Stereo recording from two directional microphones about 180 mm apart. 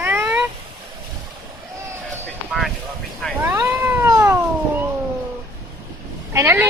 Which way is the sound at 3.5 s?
15° right (ahead or behind).